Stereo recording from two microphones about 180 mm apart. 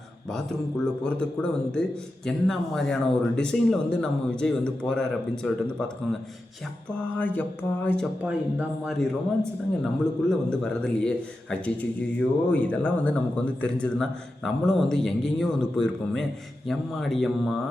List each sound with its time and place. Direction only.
1.0 s speech: 5° left (ahead or behind)
7.2 s speech: 10° left (ahead or behind)
8.2 s speech: 5° right (ahead or behind)
12.5 s speech: 10° left (ahead or behind)